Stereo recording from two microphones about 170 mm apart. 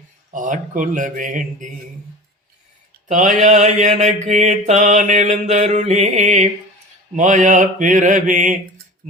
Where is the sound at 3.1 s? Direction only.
45° right (ahead or behind).